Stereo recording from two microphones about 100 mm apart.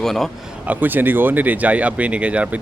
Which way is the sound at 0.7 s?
20° right (ahead or behind).